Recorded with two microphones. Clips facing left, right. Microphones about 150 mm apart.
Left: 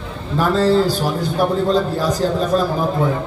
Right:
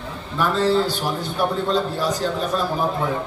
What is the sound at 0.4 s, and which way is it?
A man's voice, 40° left (ahead or behind).